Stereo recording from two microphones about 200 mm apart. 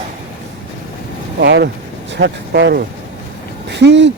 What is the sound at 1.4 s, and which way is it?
Speech, 55° right (ahead or behind).